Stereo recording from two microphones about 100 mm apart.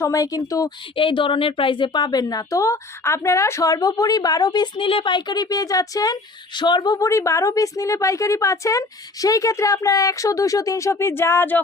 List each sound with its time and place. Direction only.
0.0 s a woman's voice: 35° left (ahead or behind)
0.9 s a woman's voice: 60° left (ahead or behind); by 6.1 s 40° left (ahead or behind)
6.6 s a woman's voice: 50° left (ahead or behind); by 11.6 s 20° left (ahead or behind)